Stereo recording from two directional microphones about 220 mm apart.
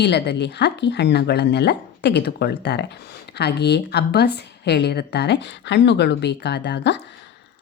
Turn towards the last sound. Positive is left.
turn(degrees=50)  # may be behind; listen again after turning